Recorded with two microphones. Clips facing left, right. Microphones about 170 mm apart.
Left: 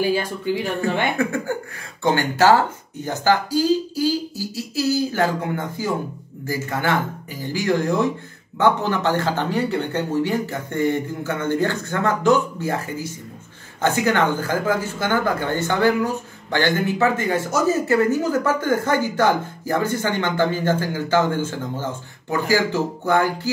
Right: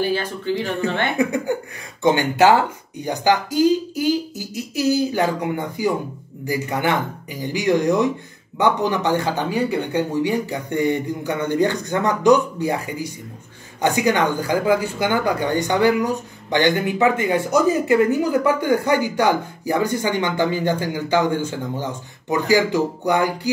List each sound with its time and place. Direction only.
0.0 s speech: 10° left (ahead or behind)
0.7 s speech: 20° right (ahead or behind)